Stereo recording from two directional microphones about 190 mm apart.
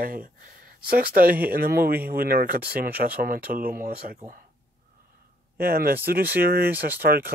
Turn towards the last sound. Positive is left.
turn(degrees=-55)  # may be behind; listen again after turning